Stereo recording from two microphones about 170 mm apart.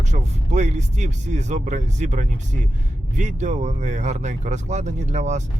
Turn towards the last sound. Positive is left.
turn(degrees=-45)  # may be behind; listen again after turning